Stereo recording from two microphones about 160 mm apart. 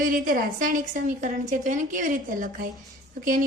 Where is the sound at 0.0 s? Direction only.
60° right (ahead or behind).